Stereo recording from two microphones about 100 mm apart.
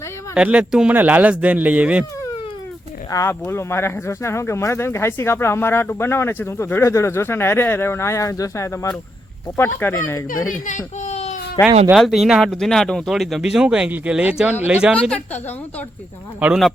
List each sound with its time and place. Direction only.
0.3 s speech: 10° right (ahead or behind)
3.1 s speech: 30° left (ahead or behind)
11.0 s a sound: 90° left
11.6 s speech: 40° left (ahead or behind)
11.9 s speech: centre (ahead or behind)
15.1 s a woman's voice: 15° left (ahead or behind)
16.4 s speech: 15° right (ahead or behind)